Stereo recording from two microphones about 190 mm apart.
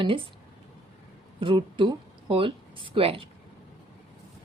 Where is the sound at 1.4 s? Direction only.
25° right (ahead or behind).